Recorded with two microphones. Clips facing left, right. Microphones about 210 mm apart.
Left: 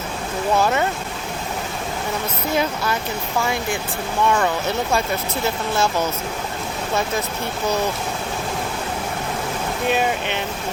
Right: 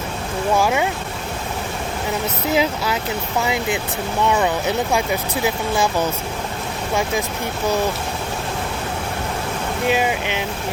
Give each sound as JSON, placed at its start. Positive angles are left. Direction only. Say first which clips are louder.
{"t": 0.6, "sound": "speech", "louder": "even", "side_deg": -10}
{"t": 2.6, "sound": "speech", "louder": "right 2 dB", "side_deg": -5}
{"t": 3.4, "sound": "speech", "louder": "right 2 dB", "side_deg": -20}
{"t": 9.9, "sound": "speech", "louder": "even", "side_deg": -10}